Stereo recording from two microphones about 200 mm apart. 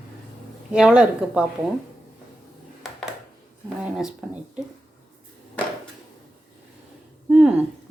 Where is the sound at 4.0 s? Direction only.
5° right (ahead or behind).